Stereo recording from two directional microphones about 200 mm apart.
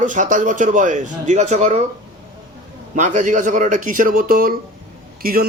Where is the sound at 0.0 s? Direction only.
40° right (ahead or behind).